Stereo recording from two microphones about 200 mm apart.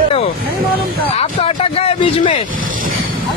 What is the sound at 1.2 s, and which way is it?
Speech, 30° left (ahead or behind).